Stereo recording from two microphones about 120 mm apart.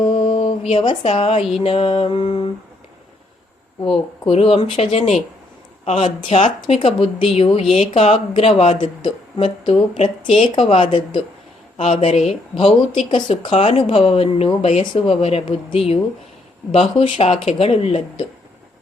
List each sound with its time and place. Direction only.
0.3 s mantra: 50° left (ahead or behind)
0.7 s speech: 50° left (ahead or behind)
4.3 s speech: 55° left (ahead or behind)